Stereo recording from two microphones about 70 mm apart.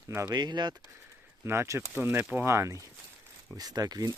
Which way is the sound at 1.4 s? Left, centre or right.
Right.